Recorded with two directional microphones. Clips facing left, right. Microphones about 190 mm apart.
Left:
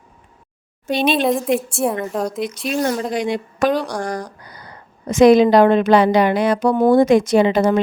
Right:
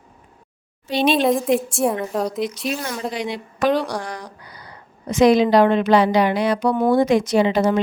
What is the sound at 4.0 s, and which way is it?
A woman's voice, 45° left (ahead or behind).